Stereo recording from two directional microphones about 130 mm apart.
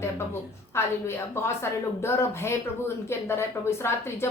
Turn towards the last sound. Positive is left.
turn(degrees=20)  # may be behind; listen again after turning